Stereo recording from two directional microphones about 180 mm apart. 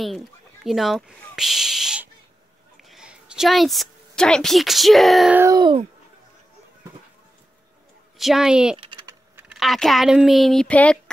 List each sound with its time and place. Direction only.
0.7 s a woman's voice: centre (ahead or behind)
5.4 s speech: 20° right (ahead or behind)
8.2 s speech: centre (ahead or behind)
8.7 s typing: 30° right (ahead or behind)
9.5 s speech: centre (ahead or behind)